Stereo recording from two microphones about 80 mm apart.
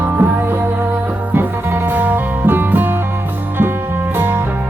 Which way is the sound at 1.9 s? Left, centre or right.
Right.